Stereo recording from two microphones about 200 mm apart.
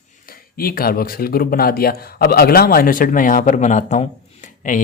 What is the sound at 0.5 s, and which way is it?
Speech, 50° left (ahead or behind).